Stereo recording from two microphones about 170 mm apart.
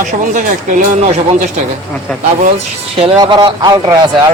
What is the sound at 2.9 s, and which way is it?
Speech, 30° right (ahead or behind).